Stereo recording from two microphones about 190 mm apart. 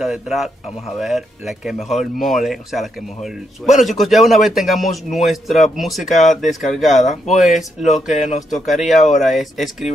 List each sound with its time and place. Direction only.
0.0 s speech: centre (ahead or behind)
6.6 s speech: 40° left (ahead or behind)
7.3 s speech: centre (ahead or behind)
7.8 s speech: 40° left (ahead or behind)
9.2 s speech: centre (ahead or behind)